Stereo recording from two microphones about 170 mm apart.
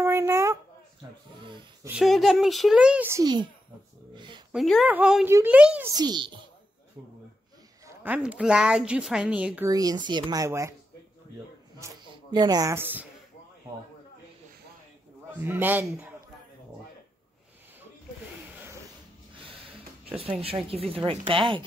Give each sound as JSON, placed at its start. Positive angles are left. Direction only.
{"t": 0.0, "sound": "a sound", "side_deg": -15}
{"t": 1.4, "sound": "a sound", "side_deg": -30}
{"t": 1.9, "sound": "a woman's voice", "side_deg": 0}
{"t": 4.1, "sound": "a sound", "side_deg": -25}
{"t": 4.5, "sound": "speech", "side_deg": 0}
{"t": 5.9, "sound": "speech", "side_deg": -25}
{"t": 8.0, "sound": "a woman's voice", "side_deg": -10}
{"t": 9.7, "sound": "speech", "side_deg": -20}
{"t": 11.8, "sound": "speech", "side_deg": -25}
{"t": 15.4, "sound": "speech", "side_deg": -10}
{"t": 18.4, "sound": "a sound", "side_deg": -10}
{"t": 20.2, "sound": "speech", "side_deg": -35}